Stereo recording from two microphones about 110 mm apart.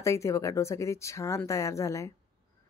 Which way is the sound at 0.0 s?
25° left (ahead or behind).